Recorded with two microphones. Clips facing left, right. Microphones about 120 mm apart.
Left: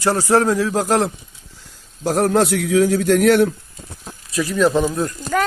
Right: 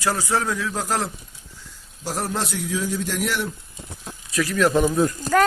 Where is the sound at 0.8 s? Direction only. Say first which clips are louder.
Left 7 dB; 75° left (ahead or behind).